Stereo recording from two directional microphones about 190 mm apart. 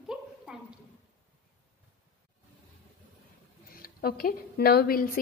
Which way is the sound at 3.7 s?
50° left (ahead or behind).